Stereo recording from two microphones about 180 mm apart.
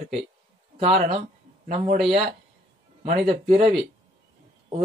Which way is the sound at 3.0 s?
35° right (ahead or behind).